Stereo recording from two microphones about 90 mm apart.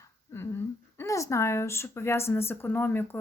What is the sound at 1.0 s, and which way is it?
Speech, 35° left (ahead or behind).